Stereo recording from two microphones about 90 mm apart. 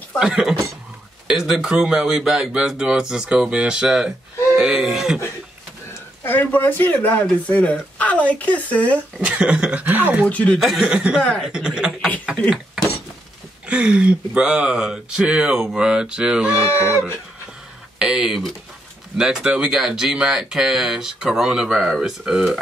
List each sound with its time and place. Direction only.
0.2 s speech: 10° right (ahead or behind)
6.2 s speech: 20° left (ahead or behind)
9.2 s speech: 15° right (ahead or behind)
10.2 s speech: 10° left (ahead or behind)
10.6 s speech: 5° right (ahead or behind)
11.1 s speech: 10° left (ahead or behind)
11.4 s speech: 10° right (ahead or behind)
13.7 s speech: 10° right (ahead or behind)
16.5 s speech: 30° left (ahead or behind)
17.9 s speech: 10° right (ahead or behind)